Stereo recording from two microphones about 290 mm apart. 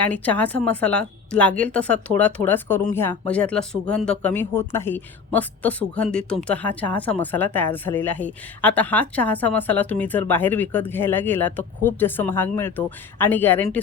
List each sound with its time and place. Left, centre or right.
0.0 s a woman's voice: centre